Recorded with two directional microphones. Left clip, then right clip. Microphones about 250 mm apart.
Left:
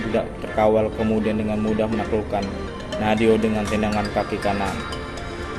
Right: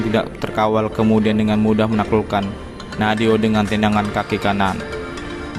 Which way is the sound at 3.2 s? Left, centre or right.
Right.